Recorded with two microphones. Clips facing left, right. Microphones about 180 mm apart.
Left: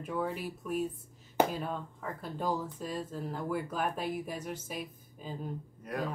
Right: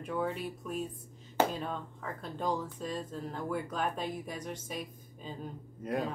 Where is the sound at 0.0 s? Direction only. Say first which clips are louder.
Even; 5° left (ahead or behind).